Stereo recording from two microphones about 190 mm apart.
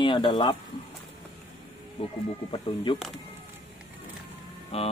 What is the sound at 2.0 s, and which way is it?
Speech, 25° left (ahead or behind).